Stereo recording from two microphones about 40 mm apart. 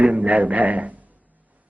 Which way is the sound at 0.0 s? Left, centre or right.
Right.